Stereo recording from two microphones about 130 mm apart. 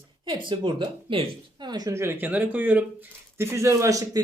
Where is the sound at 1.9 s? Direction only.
20° right (ahead or behind).